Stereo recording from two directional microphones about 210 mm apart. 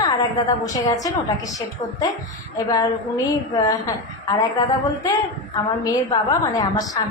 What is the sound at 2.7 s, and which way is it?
A woman's voice, 15° left (ahead or behind).